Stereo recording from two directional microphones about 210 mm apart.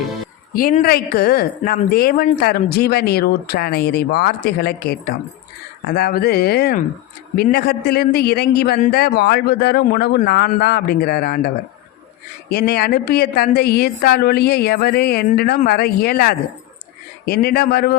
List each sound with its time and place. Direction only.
0.5 s speech: 40° left (ahead or behind)